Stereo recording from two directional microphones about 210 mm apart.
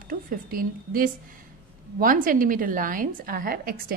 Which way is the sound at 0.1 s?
45° right (ahead or behind).